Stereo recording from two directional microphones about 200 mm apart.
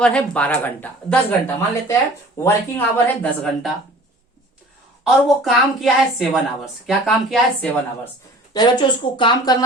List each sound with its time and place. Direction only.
0.0 s speech: 5° left (ahead or behind)
5.0 s a woman's voice: centre (ahead or behind)
8.5 s speech: 20° left (ahead or behind)